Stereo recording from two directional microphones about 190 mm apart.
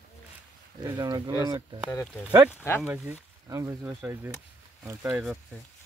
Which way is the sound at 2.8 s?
15° right (ahead or behind).